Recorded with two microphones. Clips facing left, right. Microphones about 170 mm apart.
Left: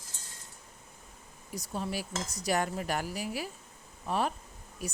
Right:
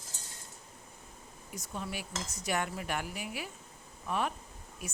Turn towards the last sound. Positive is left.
turn(degrees=35)  # may be behind; listen again after turning